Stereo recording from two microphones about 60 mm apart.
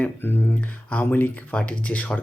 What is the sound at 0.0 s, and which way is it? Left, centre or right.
Speech, left.